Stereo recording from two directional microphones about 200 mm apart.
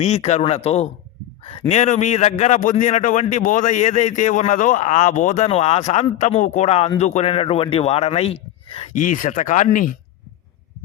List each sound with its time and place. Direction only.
0.0 s a man's voice: 35° left (ahead or behind)